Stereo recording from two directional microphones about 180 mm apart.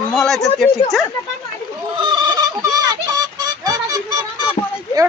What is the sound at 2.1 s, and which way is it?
Music, 20° right (ahead or behind).